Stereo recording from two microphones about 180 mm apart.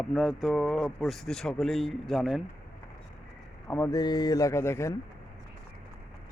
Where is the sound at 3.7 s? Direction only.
10° left (ahead or behind).